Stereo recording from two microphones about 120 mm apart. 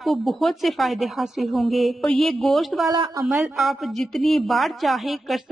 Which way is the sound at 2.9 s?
35° right (ahead or behind).